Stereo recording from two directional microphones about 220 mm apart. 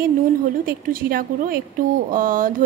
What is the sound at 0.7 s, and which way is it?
A woman's voice, 40° right (ahead or behind).